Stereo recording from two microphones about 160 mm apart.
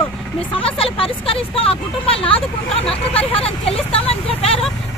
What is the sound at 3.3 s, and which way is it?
Vehicle, 35° left (ahead or behind).